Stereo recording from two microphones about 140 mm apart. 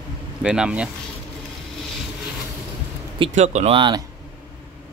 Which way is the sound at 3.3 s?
55° right (ahead or behind).